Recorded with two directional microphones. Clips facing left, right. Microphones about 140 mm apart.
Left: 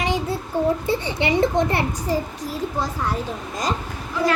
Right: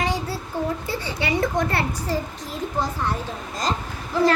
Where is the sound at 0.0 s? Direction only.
15° left (ahead or behind).